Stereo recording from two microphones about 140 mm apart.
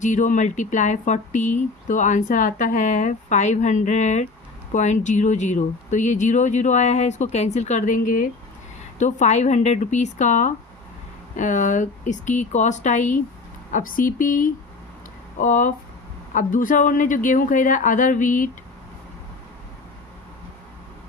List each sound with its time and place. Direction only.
0.0 s speech: 65° left (ahead or behind)
9.0 s speech: 60° left (ahead or behind)
13.7 s speech: 75° left (ahead or behind)